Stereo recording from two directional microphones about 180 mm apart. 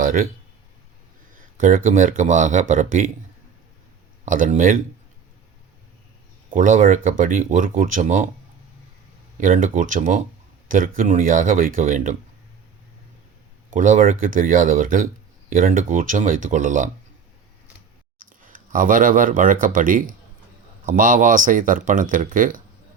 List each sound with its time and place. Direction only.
0.0 s speech: 50° right (ahead or behind)
1.5 s speech: 45° right (ahead or behind)
4.3 s speech: 50° right (ahead or behind)
6.5 s speech: 45° right (ahead or behind)
9.4 s speech: 50° right (ahead or behind)
13.7 s speech: 45° right (ahead or behind)
18.4 s speech: 50° right (ahead or behind)